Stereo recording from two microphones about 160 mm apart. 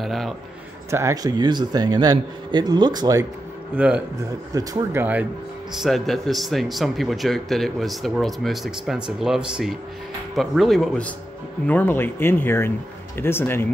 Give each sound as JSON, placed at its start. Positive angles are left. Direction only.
{"t": 0.0, "sound": "a man's voice", "side_deg": 0}
{"t": 0.8, "sound": "a man's voice", "side_deg": -20}
{"t": 3.7, "sound": "speech", "side_deg": -10}
{"t": 5.8, "sound": "speech", "side_deg": 0}